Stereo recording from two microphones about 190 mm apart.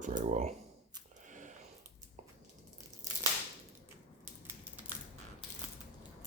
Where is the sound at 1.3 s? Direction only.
40° right (ahead or behind).